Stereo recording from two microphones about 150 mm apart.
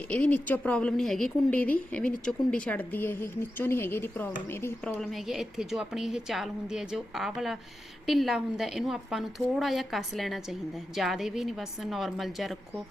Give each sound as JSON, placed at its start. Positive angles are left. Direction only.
{"t": 0.1, "sound": "a woman's voice", "side_deg": 10}
{"t": 4.9, "sound": "a woman's voice", "side_deg": 0}